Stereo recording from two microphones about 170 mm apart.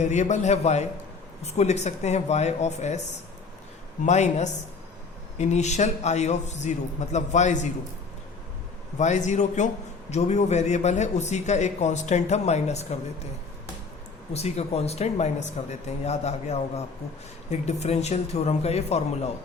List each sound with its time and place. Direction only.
0.0 s speech: 45° left (ahead or behind)
4.0 s a man's voice: 45° left (ahead or behind)
9.0 s a man's voice: 45° left (ahead or behind)
14.3 s speech: 40° left (ahead or behind)